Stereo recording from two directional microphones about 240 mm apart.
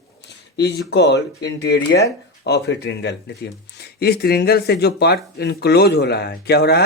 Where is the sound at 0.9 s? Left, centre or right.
Left.